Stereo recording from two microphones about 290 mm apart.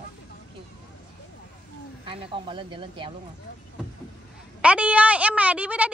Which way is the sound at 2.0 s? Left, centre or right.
Centre.